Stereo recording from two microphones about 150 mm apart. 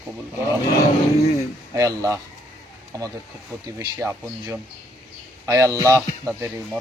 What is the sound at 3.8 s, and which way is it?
Speech, 20° right (ahead or behind).